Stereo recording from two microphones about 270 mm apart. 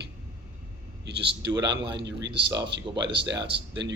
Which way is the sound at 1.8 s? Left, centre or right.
Right.